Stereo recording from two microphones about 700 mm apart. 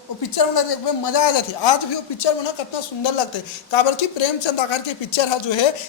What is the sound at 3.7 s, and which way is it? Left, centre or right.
A man's voice, left.